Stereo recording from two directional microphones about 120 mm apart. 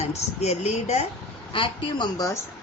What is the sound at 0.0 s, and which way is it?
Speech, 60° left (ahead or behind).